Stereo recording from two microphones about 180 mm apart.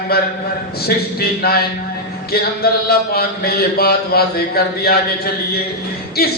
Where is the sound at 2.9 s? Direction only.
60° left (ahead or behind).